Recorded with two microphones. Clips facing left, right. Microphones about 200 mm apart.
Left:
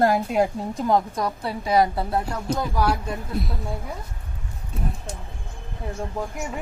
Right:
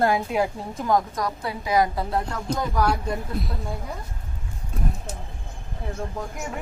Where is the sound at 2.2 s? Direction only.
10° left (ahead or behind).